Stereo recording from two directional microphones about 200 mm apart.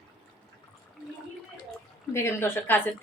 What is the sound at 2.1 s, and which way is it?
Speech, 10° left (ahead or behind).